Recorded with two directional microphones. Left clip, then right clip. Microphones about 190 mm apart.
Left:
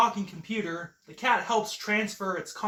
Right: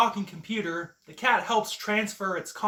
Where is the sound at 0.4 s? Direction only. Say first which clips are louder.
Right 2 dB; 15° right (ahead or behind).